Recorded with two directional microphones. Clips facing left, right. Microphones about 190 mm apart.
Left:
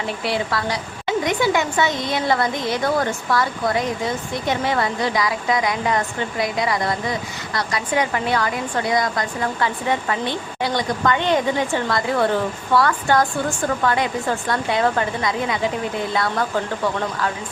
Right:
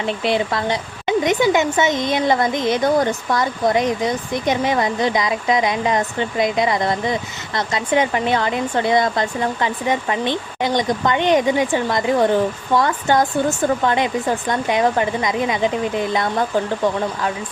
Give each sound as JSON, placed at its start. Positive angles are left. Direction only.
{"t": 0.0, "sound": "a woman's voice", "side_deg": -20}